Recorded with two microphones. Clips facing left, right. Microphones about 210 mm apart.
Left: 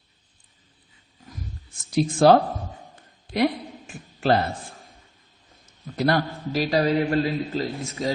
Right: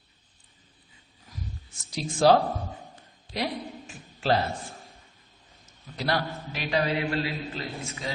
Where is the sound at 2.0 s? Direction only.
55° left (ahead or behind).